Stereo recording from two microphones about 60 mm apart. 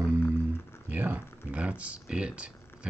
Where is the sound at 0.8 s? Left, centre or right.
Right.